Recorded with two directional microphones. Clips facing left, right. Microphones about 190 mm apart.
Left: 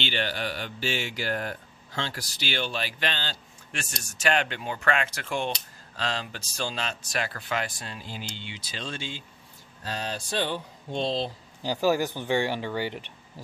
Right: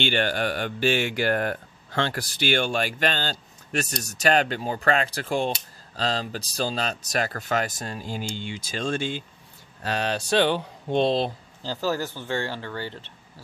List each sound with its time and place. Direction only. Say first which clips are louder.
0.0 s speech: right 6 dB; 50° right (ahead or behind)
9.8 s speech: right 7 dB; 75° right (ahead or behind)
11.6 s speech: left 3 dB; 15° left (ahead or behind)